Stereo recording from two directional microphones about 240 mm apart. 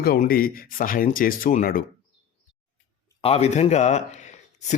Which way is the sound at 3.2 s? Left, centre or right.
Left.